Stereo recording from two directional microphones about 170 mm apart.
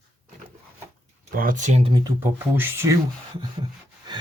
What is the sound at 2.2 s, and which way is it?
Speech, 10° right (ahead or behind).